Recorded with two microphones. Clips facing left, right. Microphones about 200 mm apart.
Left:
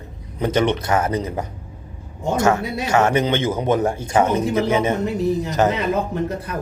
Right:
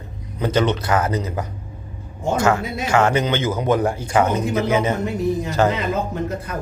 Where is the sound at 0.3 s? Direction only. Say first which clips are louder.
Left 1 dB; 25° left (ahead or behind).